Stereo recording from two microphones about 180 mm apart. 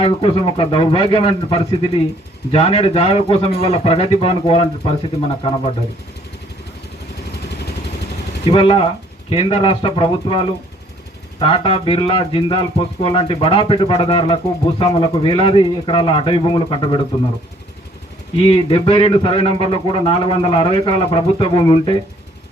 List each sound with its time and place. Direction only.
0.0 s speech: 30° left (ahead or behind)
7.3 s vehicle: 65° left (ahead or behind)
8.4 s speech: 30° left (ahead or behind)
18.3 s speech: 30° left (ahead or behind)